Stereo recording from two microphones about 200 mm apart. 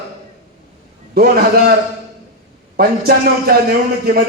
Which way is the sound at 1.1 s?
50° right (ahead or behind).